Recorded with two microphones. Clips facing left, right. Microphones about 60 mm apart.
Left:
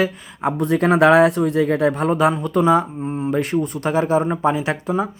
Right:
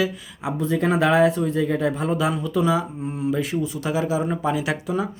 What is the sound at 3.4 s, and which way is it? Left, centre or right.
Speech, left.